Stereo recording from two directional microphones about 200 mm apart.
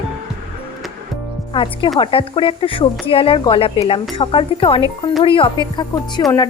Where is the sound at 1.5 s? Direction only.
25° left (ahead or behind).